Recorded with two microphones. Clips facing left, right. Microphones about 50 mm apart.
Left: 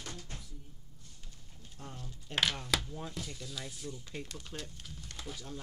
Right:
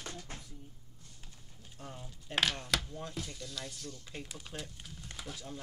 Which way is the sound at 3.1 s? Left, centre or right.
Centre.